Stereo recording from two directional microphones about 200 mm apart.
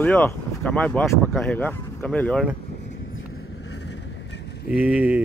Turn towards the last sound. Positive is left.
turn(degrees=-5)  # may be behind; listen again after turning